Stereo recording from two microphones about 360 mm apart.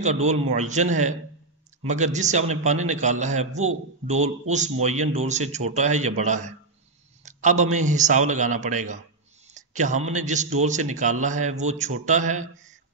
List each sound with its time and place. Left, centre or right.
0.0 s speech: centre